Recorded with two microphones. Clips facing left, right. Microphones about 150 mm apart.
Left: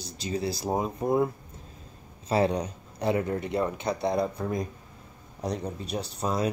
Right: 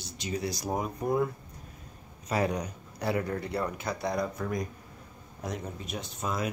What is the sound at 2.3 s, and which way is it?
Speech, 30° left (ahead or behind).